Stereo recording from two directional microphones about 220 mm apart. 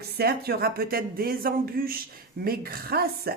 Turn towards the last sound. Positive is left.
turn(degrees=-45)  # may be behind; listen again after turning